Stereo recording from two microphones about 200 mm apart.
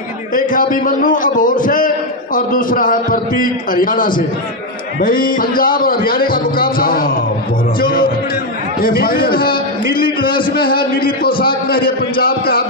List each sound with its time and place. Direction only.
0.3 s a man's voice: 45° left (ahead or behind)